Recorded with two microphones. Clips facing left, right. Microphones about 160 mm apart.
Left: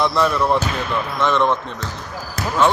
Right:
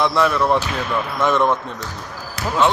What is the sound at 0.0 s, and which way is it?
Speech, centre (ahead or behind).